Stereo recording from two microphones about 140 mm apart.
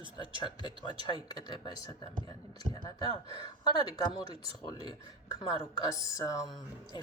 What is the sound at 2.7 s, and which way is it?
Speech, 30° left (ahead or behind).